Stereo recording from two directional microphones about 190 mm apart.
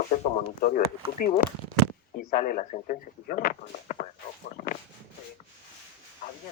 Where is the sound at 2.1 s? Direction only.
50° left (ahead or behind).